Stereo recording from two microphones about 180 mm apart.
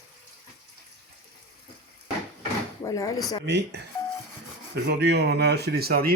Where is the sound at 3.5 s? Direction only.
70° right (ahead or behind).